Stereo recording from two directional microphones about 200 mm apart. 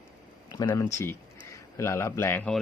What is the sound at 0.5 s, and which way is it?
Speech, 20° left (ahead or behind).